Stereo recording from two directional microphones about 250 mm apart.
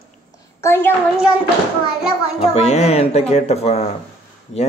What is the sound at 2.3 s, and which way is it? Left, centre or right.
A child's voice, left.